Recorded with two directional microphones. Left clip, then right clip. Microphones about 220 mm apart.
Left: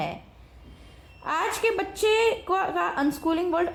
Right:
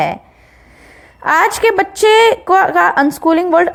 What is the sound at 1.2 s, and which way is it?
A woman's voice, 35° right (ahead or behind).